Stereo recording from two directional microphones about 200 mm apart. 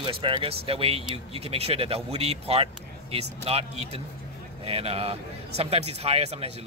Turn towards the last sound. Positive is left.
turn(degrees=-30)  # may be behind; listen again after turning